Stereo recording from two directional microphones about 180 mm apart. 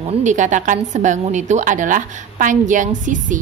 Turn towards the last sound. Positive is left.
turn(degrees=-45)  # may be behind; listen again after turning